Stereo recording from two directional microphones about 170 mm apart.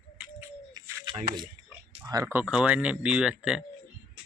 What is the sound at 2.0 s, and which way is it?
Speech, 20° right (ahead or behind).